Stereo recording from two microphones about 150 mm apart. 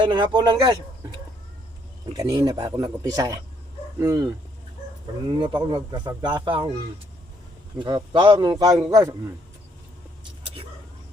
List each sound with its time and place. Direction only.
0.0 s a man's voice: 30° right (ahead or behind)
2.1 s a man's voice: 25° right (ahead or behind)
5.4 s speech: 30° right (ahead or behind)
7.8 s a man's voice: 30° right (ahead or behind)